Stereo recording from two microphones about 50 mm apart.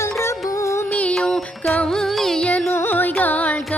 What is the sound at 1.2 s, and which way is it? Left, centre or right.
Music, centre.